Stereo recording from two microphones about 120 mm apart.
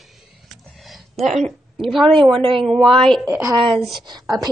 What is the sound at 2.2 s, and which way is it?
Speech, 45° right (ahead or behind).